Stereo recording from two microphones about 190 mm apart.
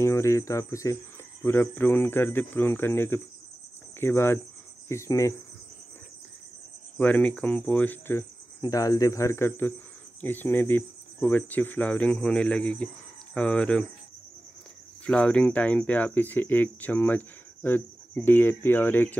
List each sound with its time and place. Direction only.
0.0 s speech: 15° left (ahead or behind)
7.0 s speech: 5° left (ahead or behind)
15.0 s speech: 5° left (ahead or behind)